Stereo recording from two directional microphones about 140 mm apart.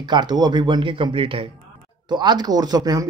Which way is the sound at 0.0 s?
30° right (ahead or behind).